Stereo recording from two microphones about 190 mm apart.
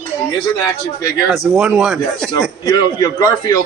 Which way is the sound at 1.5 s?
5° right (ahead or behind).